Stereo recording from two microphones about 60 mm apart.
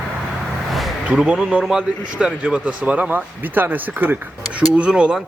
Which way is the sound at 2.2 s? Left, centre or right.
Centre.